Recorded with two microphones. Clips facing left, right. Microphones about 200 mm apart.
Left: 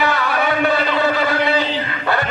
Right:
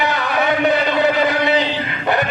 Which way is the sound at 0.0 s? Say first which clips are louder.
Even; 20° right (ahead or behind).